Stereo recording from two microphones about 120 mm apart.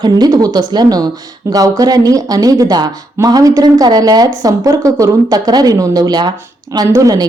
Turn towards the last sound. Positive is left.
turn(degrees=-30)  # may be behind; listen again after turning